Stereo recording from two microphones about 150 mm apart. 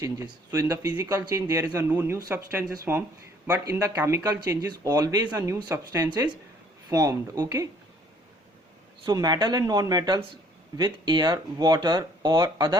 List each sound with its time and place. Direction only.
0.0 s speech: 20° right (ahead or behind)
9.0 s speech: 25° right (ahead or behind)